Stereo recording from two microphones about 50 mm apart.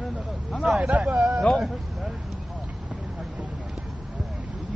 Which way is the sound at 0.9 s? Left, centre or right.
Right.